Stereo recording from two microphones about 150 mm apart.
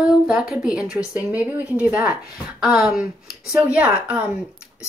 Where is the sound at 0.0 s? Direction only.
5° right (ahead or behind).